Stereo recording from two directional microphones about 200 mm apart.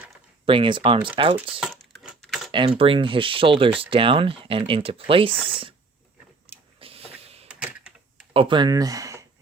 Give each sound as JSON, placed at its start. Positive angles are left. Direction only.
{"t": 0.4, "sound": "speech", "side_deg": -25}
{"t": 1.6, "sound": "a sound", "side_deg": 0}
{"t": 2.5, "sound": "speech", "side_deg": -25}
{"t": 6.7, "sound": "power windows", "side_deg": -30}
{"t": 8.3, "sound": "speech", "side_deg": -25}